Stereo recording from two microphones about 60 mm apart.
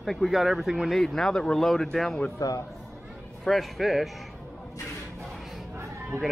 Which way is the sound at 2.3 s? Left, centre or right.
Left.